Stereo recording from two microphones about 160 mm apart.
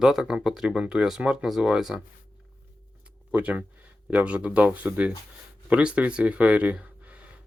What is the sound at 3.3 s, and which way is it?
Speech, 10° right (ahead or behind).